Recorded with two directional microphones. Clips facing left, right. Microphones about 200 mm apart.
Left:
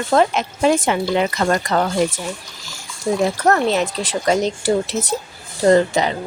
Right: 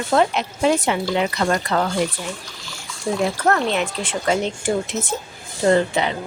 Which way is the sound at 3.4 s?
40° left (ahead or behind).